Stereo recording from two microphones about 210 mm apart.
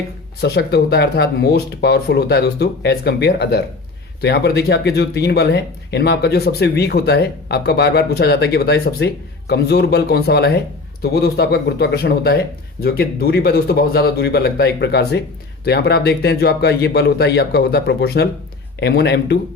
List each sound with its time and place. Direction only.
0.4 s speech: 50° left (ahead or behind)